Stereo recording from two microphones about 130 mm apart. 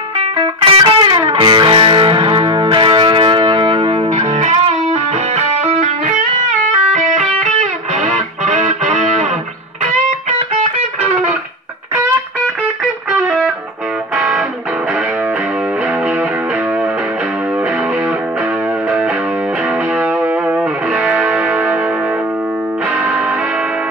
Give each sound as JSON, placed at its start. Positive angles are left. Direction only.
{"t": 0.2, "sound": "music", "side_deg": -45}
{"t": 4.1, "sound": "music", "side_deg": -55}
{"t": 6.9, "sound": "music", "side_deg": -65}
{"t": 8.5, "sound": "music", "side_deg": -70}
{"t": 10.5, "sound": "music", "side_deg": -55}
{"t": 13.1, "sound": "music", "side_deg": -15}
{"t": 20.0, "sound": "music", "side_deg": -10}